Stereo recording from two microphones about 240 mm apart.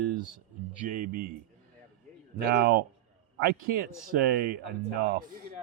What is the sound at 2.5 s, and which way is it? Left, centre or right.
Speech, right.